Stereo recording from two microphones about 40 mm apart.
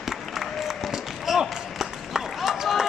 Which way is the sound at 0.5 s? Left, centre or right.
Centre.